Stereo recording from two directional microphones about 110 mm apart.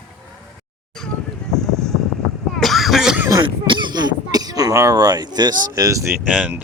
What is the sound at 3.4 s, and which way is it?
Throat clearing, 45° right (ahead or behind).